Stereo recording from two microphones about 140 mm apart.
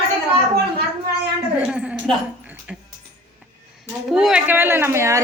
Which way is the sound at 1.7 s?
5° right (ahead or behind).